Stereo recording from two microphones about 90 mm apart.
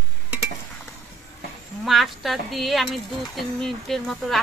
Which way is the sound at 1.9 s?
Centre (ahead or behind).